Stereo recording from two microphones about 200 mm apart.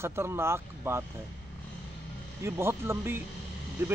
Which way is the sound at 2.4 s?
10° right (ahead or behind).